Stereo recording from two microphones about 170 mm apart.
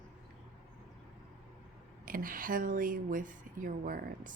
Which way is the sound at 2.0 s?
55° right (ahead or behind).